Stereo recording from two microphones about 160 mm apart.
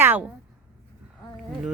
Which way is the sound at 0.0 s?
10° right (ahead or behind).